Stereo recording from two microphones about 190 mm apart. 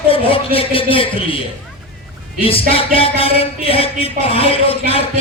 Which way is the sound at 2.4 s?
30° left (ahead or behind).